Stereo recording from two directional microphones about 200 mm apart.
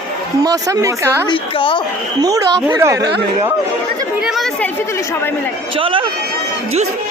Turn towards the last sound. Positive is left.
turn(degrees=-25)  # may be behind; listen again after turning